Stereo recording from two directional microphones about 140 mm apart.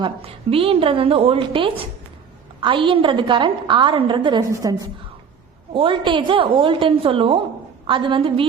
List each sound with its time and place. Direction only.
0.0 s a woman's voice: 40° right (ahead or behind); by 4.8 s 25° right (ahead or behind)
5.7 s a woman's voice: 40° right (ahead or behind)